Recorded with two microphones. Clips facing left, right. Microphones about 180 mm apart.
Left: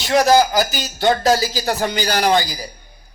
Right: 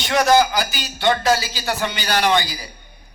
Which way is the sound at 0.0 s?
35° left (ahead or behind).